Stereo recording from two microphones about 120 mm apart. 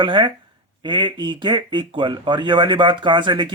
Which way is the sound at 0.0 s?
40° right (ahead or behind).